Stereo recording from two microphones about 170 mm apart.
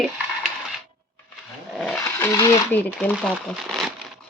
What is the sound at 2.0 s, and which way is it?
Roaring cats, 15° left (ahead or behind).